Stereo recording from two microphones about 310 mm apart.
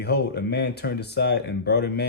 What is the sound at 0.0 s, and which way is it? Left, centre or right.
Speech, left.